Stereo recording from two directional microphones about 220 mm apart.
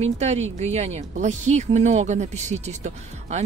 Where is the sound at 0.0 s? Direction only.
30° right (ahead or behind).